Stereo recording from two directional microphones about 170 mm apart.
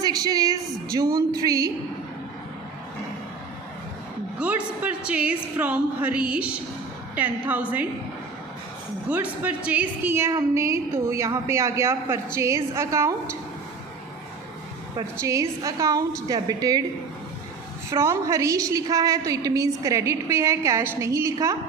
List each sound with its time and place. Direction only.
0.0 s a sound: 20° right (ahead or behind)
0.9 s a woman's voice: 25° right (ahead or behind)
4.4 s a woman's voice: 10° right (ahead or behind)
9.0 s a woman's voice: 10° right (ahead or behind)
14.9 s a woman's voice: 20° right (ahead or behind)
17.9 s a woman's voice: 15° right (ahead or behind)